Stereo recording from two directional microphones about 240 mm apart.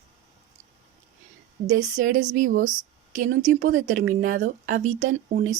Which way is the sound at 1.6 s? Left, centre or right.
Right.